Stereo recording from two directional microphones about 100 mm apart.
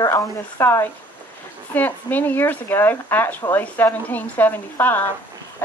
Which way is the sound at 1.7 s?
15° left (ahead or behind).